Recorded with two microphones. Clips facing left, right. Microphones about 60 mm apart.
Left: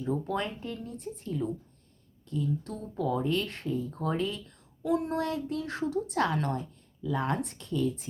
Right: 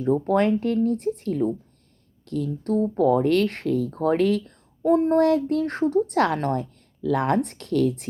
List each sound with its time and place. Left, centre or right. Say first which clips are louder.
0.0 s speech: right 11 dB; right
2.2 s speech: right 5 dB; right
2.7 s speech: right 15 dB; right
3.9 s speech: right 11 dB; right
4.4 s a sound: right 9 dB; right
5.2 s speech: right 12 dB; right
6.1 s speech: right 7 dB; right